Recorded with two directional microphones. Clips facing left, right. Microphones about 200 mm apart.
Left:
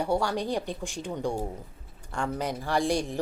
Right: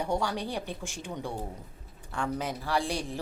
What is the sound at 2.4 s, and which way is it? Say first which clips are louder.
Speech: left 6 dB; 15° left (ahead or behind).